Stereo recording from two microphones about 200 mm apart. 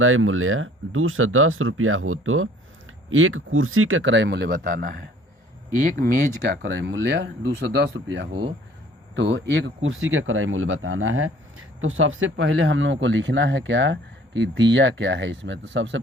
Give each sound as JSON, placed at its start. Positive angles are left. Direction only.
{"t": 0.0, "sound": "speech", "side_deg": -90}
{"t": 6.6, "sound": "speech", "side_deg": -65}
{"t": 8.3, "sound": "speech", "side_deg": -25}
{"t": 9.1, "sound": "speech", "side_deg": -65}
{"t": 10.1, "sound": "speech", "side_deg": -85}